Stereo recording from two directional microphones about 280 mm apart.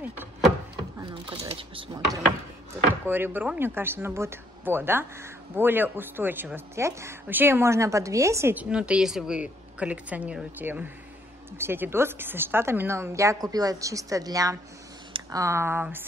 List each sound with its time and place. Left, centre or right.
0.0 s a sound: centre
0.9 s speech: centre
3.1 s speech: centre